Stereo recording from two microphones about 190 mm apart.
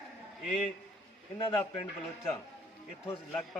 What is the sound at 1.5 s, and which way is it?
Speech, 25° left (ahead or behind).